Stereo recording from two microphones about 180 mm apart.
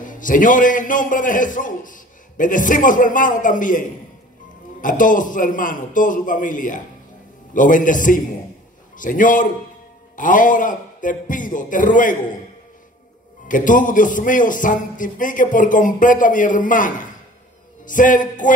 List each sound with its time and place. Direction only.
0.0 s a man's voice: 45° left (ahead or behind)
4.8 s a man's voice: 45° left (ahead or behind)
13.5 s a man's voice: 45° left (ahead or behind)